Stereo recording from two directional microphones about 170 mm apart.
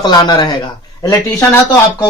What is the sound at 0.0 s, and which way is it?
Speech, 25° left (ahead or behind).